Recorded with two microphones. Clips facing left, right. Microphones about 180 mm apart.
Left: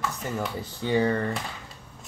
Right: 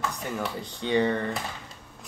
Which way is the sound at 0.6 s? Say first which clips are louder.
Even; 5° left (ahead or behind).